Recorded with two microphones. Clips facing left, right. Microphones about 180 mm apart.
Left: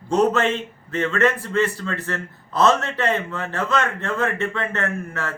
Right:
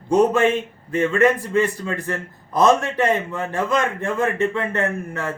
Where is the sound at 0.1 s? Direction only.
15° right (ahead or behind).